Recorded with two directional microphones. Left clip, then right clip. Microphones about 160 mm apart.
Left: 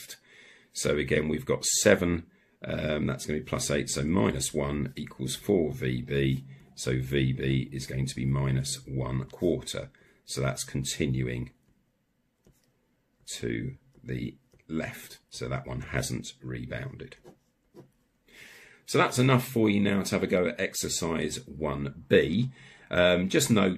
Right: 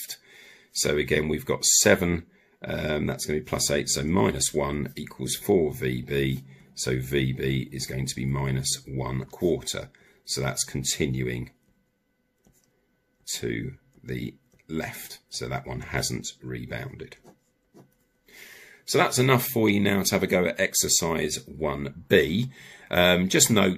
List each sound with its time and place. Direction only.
0.1 s speech: 25° right (ahead or behind)
13.2 s speech: 25° right (ahead or behind)
18.9 s speech: 25° right (ahead or behind)